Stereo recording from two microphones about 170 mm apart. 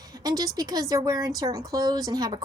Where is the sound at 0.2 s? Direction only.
20° right (ahead or behind).